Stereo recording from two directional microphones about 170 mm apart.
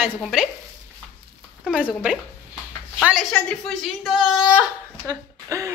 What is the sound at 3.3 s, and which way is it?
A woman's voice, centre (ahead or behind).